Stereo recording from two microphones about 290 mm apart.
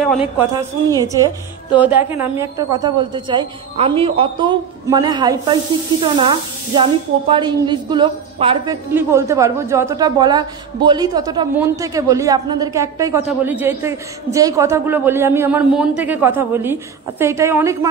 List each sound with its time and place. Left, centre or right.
0.0 s a woman's voice: centre